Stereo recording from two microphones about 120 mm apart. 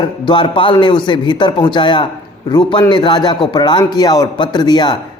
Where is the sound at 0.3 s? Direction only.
45° left (ahead or behind).